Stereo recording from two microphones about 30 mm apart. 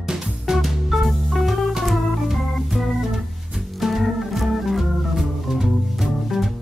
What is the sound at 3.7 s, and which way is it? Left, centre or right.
Organ, centre.